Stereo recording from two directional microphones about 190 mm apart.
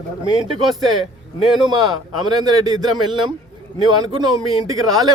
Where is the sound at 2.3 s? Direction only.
20° right (ahead or behind).